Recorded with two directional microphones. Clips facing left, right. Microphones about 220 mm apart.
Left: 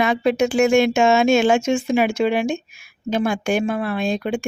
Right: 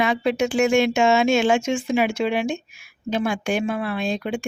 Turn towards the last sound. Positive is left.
turn(degrees=45)  # may be behind; listen again after turning